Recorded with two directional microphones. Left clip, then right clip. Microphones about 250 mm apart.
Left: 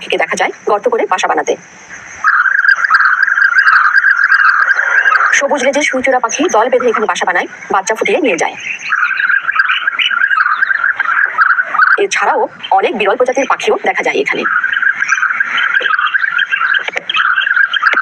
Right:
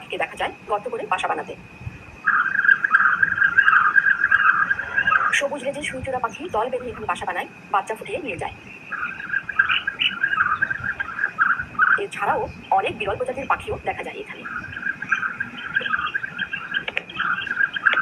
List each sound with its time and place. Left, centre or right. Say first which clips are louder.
0.1 s speech: left 12 dB; left
2.3 s frog: left 8 dB; left
8.9 s bird: left 15 dB; left